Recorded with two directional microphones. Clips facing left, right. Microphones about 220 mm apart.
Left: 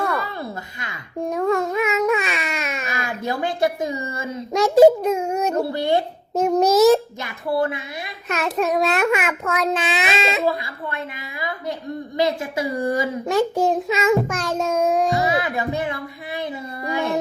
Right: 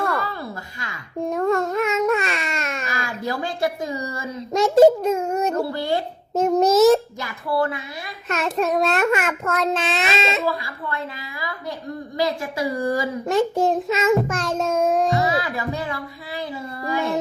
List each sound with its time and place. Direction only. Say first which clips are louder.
1.2 s baby cry: even; centre (ahead or behind)
2.8 s speech: left 1 dB; 20° left (ahead or behind)
4.5 s a child's voice: left 1 dB; centre (ahead or behind)
5.5 s a woman's voice: left 3 dB; 20° left (ahead or behind)
6.3 s a child's voice: even; centre (ahead or behind)
7.2 s a woman's voice: left 1 dB; 20° left (ahead or behind)
8.3 s a child's voice: even; centre (ahead or behind)
10.4 s a woman's voice: left 2 dB; 20° left (ahead or behind)
13.2 s a child's voice: even; centre (ahead or behind)
15.2 s music: left 1 dB; 20° left (ahead or behind)
16.8 s child singing: even; 20° left (ahead or behind)